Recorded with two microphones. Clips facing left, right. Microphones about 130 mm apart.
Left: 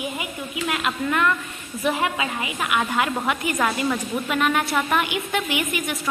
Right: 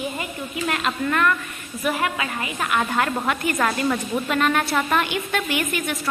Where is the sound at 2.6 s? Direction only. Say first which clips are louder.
Right 1 dB; 5° left (ahead or behind).